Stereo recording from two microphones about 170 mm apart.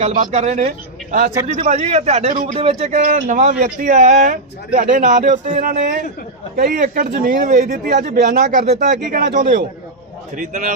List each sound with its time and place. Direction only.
0.0 s speech: 45° right (ahead or behind)
8.6 s speech: 45° right (ahead or behind)